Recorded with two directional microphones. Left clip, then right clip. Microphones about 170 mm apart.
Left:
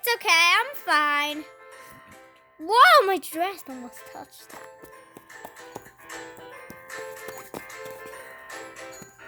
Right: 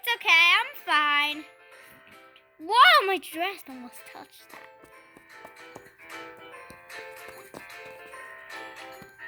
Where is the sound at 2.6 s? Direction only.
40° left (ahead or behind).